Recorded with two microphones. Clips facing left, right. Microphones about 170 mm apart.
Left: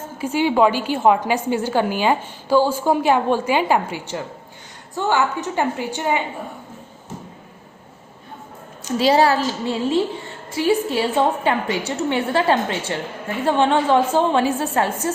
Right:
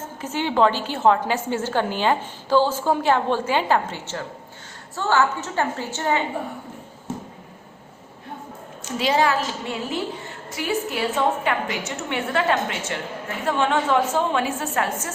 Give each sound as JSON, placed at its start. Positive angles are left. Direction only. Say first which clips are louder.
{"t": 0.2, "sound": "a woman's voice", "louder": "left 3 dB", "side_deg": 10}
{"t": 9.0, "sound": "a woman's voice", "louder": "left 5 dB", "side_deg": 35}